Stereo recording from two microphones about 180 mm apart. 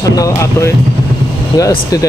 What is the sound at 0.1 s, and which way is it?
Speech, 15° left (ahead or behind).